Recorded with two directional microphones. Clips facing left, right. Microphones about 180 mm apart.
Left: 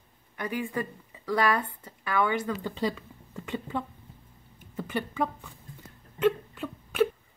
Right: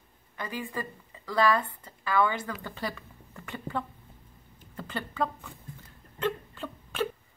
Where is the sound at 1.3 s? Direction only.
15° left (ahead or behind).